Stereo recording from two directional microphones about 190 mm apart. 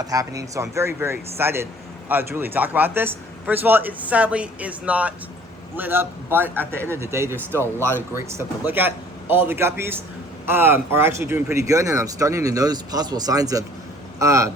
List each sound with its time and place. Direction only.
0.0 s speech: 20° right (ahead or behind)